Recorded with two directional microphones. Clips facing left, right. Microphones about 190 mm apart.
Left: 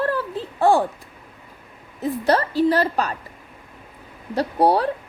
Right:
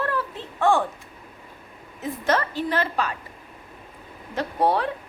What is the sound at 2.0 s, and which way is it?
A woman's voice, 35° left (ahead or behind).